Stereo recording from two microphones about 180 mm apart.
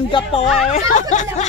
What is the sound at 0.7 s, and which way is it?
Speech, 40° left (ahead or behind).